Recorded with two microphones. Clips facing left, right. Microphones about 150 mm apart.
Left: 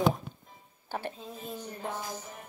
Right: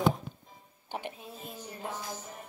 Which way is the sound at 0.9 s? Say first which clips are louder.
Left 2 dB; 15° right (ahead or behind).